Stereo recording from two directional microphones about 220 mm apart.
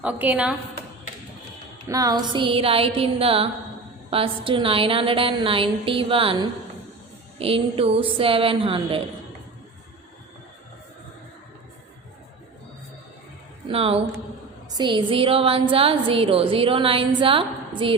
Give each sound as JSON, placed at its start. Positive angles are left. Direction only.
{"t": 0.0, "sound": "a woman's voice", "side_deg": -5}
{"t": 1.9, "sound": "a woman's voice", "side_deg": -15}
{"t": 13.7, "sound": "a woman's voice", "side_deg": -25}